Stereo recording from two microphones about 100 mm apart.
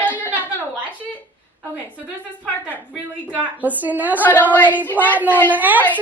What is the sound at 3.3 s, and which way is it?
Speech, 15° right (ahead or behind).